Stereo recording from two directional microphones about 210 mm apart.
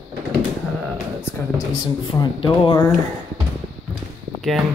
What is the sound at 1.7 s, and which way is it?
Speech, 20° left (ahead or behind).